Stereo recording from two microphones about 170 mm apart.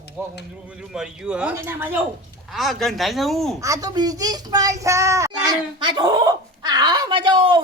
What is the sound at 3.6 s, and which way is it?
Speech, 20° right (ahead or behind).